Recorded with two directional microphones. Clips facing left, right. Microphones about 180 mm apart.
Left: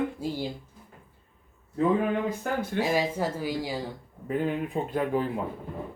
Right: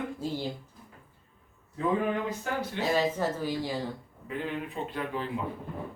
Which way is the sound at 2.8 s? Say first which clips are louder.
Even; 10° left (ahead or behind).